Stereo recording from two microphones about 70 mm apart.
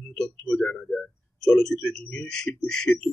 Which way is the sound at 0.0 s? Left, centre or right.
Centre.